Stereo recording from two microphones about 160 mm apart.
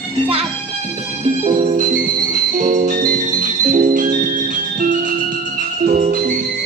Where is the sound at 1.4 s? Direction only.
55° right (ahead or behind).